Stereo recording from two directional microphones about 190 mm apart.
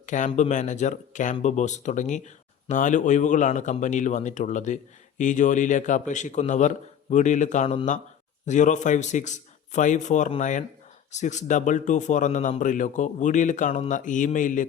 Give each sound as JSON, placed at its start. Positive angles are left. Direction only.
{"t": 0.0, "sound": "speech", "side_deg": 40}